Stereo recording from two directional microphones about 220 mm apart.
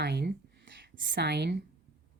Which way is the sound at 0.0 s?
50° right (ahead or behind).